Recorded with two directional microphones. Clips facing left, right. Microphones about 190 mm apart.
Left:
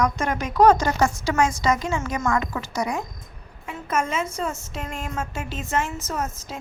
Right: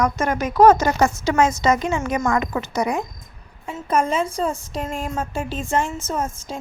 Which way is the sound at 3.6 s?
35° right (ahead or behind).